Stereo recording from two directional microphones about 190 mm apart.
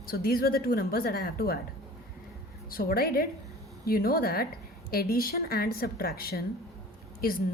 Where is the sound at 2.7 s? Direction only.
50° left (ahead or behind).